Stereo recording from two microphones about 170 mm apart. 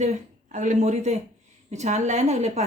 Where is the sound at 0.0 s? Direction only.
45° right (ahead or behind).